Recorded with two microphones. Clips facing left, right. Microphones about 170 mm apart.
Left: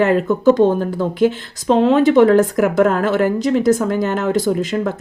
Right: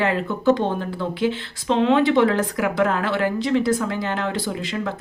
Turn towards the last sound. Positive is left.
turn(degrees=45)  # may be behind; listen again after turning